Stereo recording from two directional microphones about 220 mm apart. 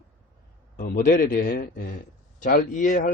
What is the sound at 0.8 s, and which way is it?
Speech, 40° left (ahead or behind).